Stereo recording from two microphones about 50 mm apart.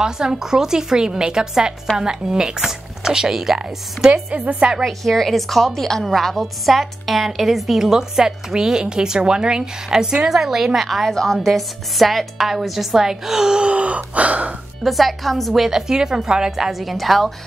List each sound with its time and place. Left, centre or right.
0.0 s a woman's voice: centre
4.1 s a woman's voice: right
4.8 s a woman's voice: centre; by 14.5 s right
14.8 s a woman's voice: centre